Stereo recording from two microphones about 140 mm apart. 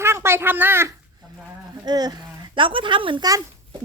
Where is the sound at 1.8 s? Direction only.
30° right (ahead or behind).